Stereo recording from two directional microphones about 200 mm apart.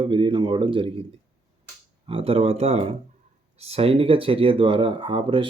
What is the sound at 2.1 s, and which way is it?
A man's voice, 30° right (ahead or behind).